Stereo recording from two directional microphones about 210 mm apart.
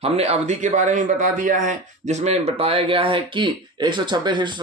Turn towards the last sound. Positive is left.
turn(degrees=-20)  # may be behind; listen again after turning